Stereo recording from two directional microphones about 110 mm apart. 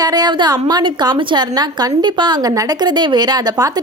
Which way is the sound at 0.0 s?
40° right (ahead or behind).